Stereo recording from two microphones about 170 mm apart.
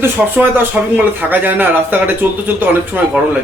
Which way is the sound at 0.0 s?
10° right (ahead or behind).